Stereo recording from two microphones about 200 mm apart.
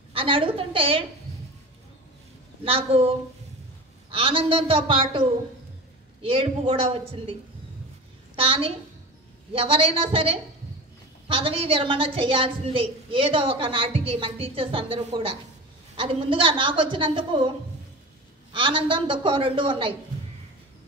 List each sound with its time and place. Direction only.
0.1 s a woman's voice: 25° right (ahead or behind)
2.6 s a woman's voice: 30° right (ahead or behind)
8.4 s a woman's voice: 25° right (ahead or behind)
18.5 s a woman's voice: 25° right (ahead or behind)